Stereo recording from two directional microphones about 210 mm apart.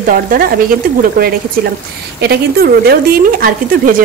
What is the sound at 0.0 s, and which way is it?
Stir, 40° right (ahead or behind).